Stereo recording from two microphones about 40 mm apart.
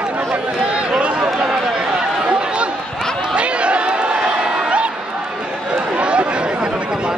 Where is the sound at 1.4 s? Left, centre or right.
Centre.